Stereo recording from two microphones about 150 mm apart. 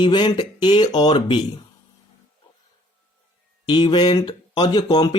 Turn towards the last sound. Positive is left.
turn(degrees=30)  # may be behind; listen again after turning